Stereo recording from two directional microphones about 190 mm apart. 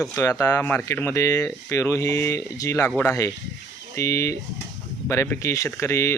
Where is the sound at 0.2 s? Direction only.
15° left (ahead or behind).